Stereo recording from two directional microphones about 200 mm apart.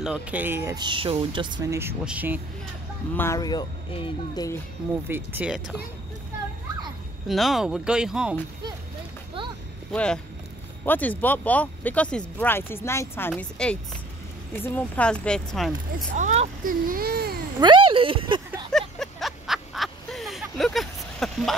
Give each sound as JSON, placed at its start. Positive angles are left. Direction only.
{"t": 0.0, "sound": "speech", "side_deg": -5}
{"t": 3.2, "sound": "speech", "side_deg": 15}
{"t": 5.0, "sound": "speech", "side_deg": -10}
{"t": 7.2, "sound": "speech", "side_deg": 0}
{"t": 9.9, "sound": "speech", "side_deg": 5}
{"t": 16.2, "sound": "a child's voice", "side_deg": -35}
{"t": 17.6, "sound": "speech", "side_deg": -25}
{"t": 18.7, "sound": "a sound", "side_deg": 0}